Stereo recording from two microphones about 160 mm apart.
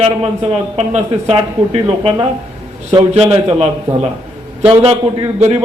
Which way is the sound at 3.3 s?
35° right (ahead or behind).